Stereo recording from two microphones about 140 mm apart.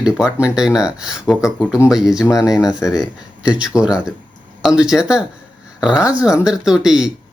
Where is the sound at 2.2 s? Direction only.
25° left (ahead or behind).